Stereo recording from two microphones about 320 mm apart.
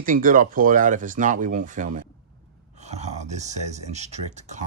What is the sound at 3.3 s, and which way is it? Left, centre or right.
Speech, right.